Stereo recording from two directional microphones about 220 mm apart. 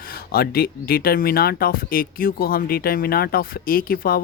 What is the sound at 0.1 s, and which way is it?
Speech, 45° left (ahead or behind).